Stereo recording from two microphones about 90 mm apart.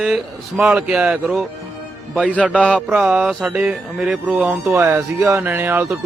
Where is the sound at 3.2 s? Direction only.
10° right (ahead or behind).